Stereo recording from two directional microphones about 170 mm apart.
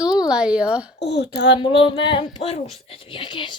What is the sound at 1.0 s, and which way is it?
Speech, 80° left.